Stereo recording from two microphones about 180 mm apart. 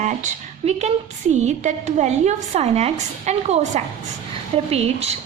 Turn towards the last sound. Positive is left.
turn(degrees=-35)  # may be behind; listen again after turning